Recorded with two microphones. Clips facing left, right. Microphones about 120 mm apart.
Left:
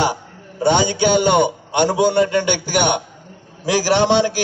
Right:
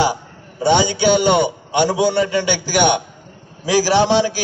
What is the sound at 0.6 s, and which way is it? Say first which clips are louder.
A man's voice: even; 45° left (ahead or behind).